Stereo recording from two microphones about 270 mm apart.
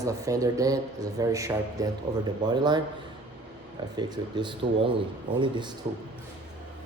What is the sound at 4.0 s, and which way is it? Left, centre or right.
Speech, centre.